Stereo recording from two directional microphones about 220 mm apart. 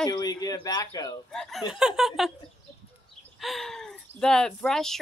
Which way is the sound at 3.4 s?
Centre (ahead or behind).